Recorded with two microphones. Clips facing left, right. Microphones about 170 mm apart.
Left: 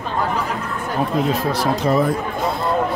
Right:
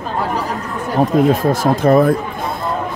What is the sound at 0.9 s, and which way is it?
Speech, 45° right (ahead or behind).